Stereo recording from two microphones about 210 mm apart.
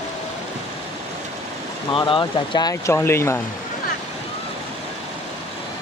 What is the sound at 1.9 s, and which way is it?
Speech, 25° left (ahead or behind).